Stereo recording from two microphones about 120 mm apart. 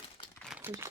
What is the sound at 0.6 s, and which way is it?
Speech, 15° right (ahead or behind).